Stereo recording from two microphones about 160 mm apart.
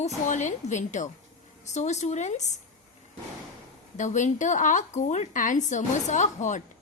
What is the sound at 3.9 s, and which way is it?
Speech, 50° left (ahead or behind).